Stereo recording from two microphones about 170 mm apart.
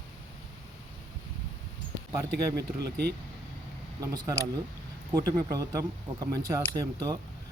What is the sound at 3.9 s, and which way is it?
Speech, 20° right (ahead or behind).